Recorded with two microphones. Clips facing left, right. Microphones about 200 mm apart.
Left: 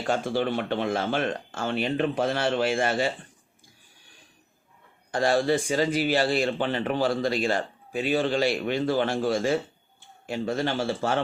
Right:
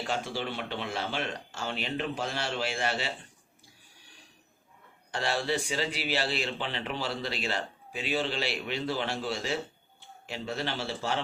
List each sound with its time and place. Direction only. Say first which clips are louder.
0.1 s speech: left 10 dB; 50° left (ahead or behind)
5.1 s speech: left 8 dB; 45° left (ahead or behind)